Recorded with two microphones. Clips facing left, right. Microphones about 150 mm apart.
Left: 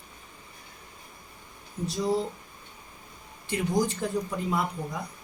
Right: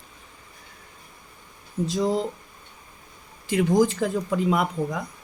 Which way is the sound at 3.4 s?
90° right.